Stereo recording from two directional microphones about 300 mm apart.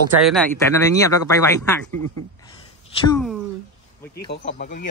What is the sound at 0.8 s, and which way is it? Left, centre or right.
Speech, centre.